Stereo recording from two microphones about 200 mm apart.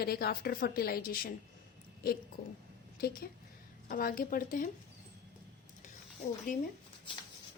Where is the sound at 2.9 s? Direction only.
50° left (ahead or behind).